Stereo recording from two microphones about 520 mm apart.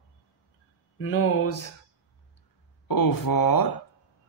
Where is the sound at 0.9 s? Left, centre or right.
Left.